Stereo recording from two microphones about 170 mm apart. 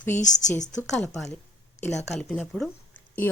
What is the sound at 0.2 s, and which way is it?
Speech, 45° left (ahead or behind).